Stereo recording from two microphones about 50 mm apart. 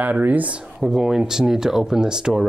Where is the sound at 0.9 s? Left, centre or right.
Centre.